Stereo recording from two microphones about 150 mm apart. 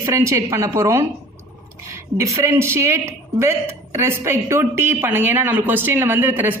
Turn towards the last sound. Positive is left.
turn(degrees=-15)  # may be behind; listen again after turning